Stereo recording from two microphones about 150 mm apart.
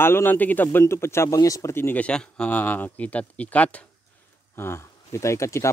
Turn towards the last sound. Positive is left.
turn(degrees=20)  # may be behind; listen again after turning